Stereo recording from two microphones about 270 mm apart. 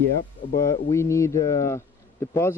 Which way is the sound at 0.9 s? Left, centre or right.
Centre.